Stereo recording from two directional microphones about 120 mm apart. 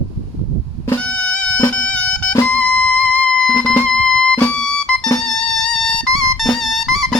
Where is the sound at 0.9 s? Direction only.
5° left (ahead or behind).